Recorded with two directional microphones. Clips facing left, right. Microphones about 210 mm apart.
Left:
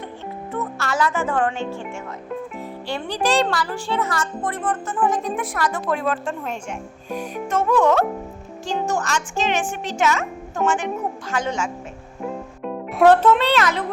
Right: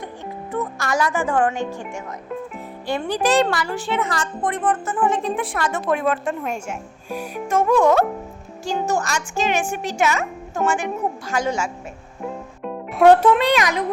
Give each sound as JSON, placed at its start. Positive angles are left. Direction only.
{"t": 0.5, "sound": "speech", "side_deg": -15}
{"t": 3.1, "sound": "speech", "side_deg": -5}
{"t": 3.5, "sound": "a child's voice", "side_deg": -15}
{"t": 5.0, "sound": "a child's voice", "side_deg": -25}
{"t": 12.2, "sound": "music", "side_deg": 0}
{"t": 13.1, "sound": "a child's voice", "side_deg": -10}